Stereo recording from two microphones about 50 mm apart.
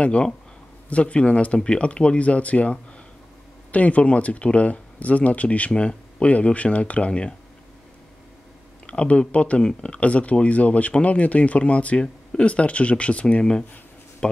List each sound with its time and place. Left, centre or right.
0.0 s speech: left
8.8 s speech: left